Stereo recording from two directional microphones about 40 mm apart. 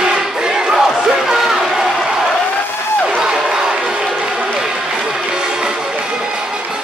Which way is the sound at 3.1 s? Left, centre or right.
Centre.